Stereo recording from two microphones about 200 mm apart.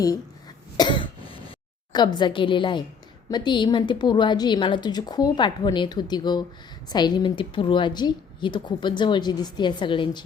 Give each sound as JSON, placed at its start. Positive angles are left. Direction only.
{"t": 0.8, "sound": "cough", "side_deg": 25}
{"t": 1.9, "sound": "speech", "side_deg": 20}